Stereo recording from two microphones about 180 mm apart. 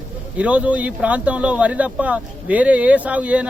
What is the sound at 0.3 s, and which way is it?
Speech, 5° right (ahead or behind).